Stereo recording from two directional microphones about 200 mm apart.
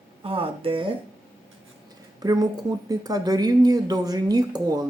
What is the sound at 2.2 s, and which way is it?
Speech, 20° right (ahead or behind).